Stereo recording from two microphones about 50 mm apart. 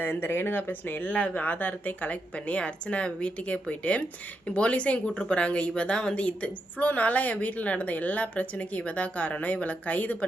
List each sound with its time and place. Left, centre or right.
0.0 s speech: left